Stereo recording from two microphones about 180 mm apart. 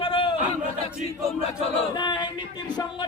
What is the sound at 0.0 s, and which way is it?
Crowd, 30° left (ahead or behind).